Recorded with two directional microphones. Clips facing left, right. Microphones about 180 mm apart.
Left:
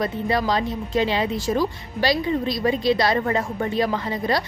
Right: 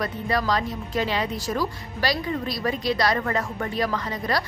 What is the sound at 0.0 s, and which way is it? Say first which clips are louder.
A woman's voice: left 3 dB; 25° left (ahead or behind).